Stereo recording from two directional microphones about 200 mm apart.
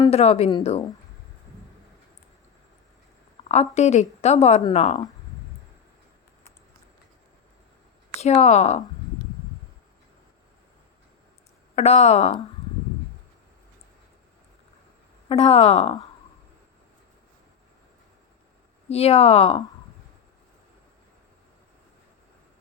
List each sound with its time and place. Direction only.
0.1 s a woman's voice: 30° left (ahead or behind)
3.5 s a woman's voice: 35° left (ahead or behind)
8.2 s a woman's voice: 35° left (ahead or behind)
11.7 s a woman's voice: 35° left (ahead or behind)
15.3 s a woman's voice: 30° left (ahead or behind)
18.9 s a woman's voice: 30° left (ahead or behind)